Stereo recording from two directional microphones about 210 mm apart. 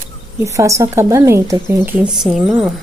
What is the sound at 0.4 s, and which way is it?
A woman's voice, 15° right (ahead or behind).